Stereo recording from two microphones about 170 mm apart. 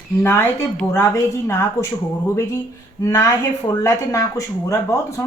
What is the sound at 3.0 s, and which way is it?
Speech, 20° left (ahead or behind).